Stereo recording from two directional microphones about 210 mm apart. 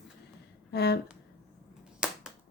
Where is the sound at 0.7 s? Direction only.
50° left (ahead or behind).